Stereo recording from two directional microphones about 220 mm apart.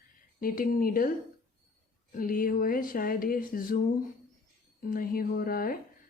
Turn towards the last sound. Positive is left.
turn(degrees=40)  # may be behind; listen again after turning